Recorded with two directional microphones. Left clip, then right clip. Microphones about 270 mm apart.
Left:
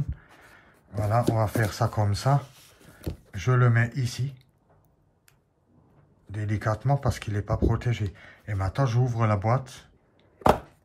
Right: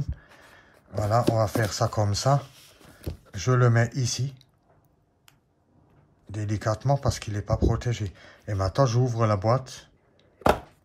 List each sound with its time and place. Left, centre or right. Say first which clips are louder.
0.1 s speech: right 1 dB; centre
6.2 s speech: right 1 dB; centre